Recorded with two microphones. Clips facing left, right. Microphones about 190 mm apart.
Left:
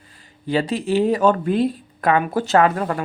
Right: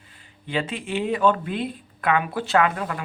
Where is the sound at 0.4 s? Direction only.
40° left (ahead or behind).